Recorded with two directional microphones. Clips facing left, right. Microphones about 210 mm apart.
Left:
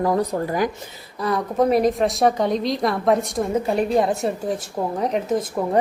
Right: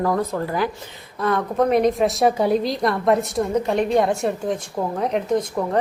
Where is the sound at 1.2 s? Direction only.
Centre (ahead or behind).